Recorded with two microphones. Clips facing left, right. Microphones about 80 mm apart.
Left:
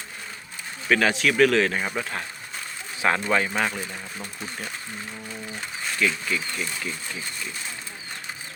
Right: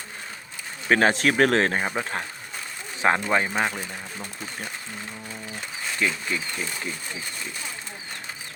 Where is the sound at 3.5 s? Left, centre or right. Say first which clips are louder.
Even; centre.